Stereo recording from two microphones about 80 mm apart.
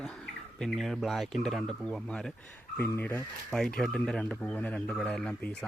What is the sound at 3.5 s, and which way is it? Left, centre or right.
Speech, centre.